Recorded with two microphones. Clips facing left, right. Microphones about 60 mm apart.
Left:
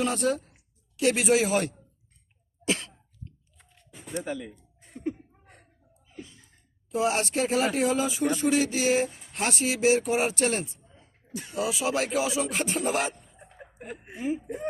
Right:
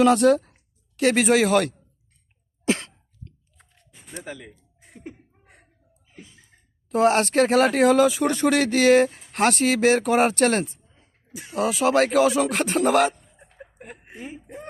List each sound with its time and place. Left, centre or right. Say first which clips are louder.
0.0 s speech: right 10 dB; right
0.5 s speech: right 2 dB; right
2.6 s cough: right 5 dB; right
4.2 s speech: left 3 dB; centre
4.8 s chuckle: left 8 dB; centre
6.8 s speech: right 7 dB; right
13.8 s speech: left 7 dB; centre